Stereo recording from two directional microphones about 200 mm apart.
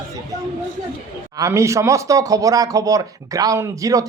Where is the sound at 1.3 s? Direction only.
15° right (ahead or behind).